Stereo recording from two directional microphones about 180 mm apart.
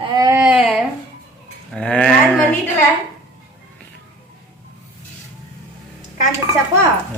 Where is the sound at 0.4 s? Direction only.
5° right (ahead or behind).